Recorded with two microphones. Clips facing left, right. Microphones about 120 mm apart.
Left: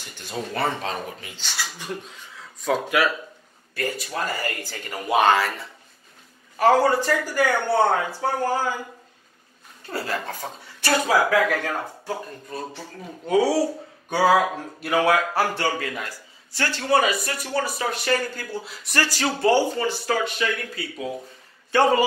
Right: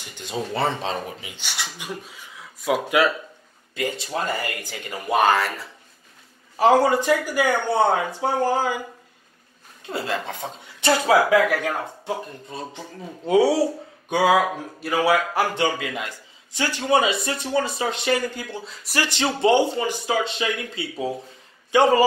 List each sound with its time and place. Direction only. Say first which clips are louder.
0.1 s a man's voice: right 2 dB; 20° right (ahead or behind)
5.0 s speech: even; centre (ahead or behind)
6.6 s speech: right 1 dB; 15° right (ahead or behind)
9.8 s a man's voice: right 1 dB; 20° right (ahead or behind)
14.1 s speech: even; 15° right (ahead or behind)
14.8 s speech: even; centre (ahead or behind)
15.3 s a man's voice: right 1 dB; 20° right (ahead or behind)
18.6 s speech: even; 5° left (ahead or behind)
19.0 s a man's voice: right 2 dB; 25° right (ahead or behind)